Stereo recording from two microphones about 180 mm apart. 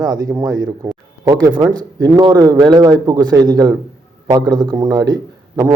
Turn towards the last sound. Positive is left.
turn(degrees=-20)  # may be behind; listen again after turning